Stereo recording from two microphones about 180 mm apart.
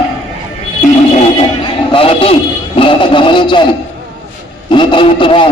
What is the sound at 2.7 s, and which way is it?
A man's voice, 30° left (ahead or behind).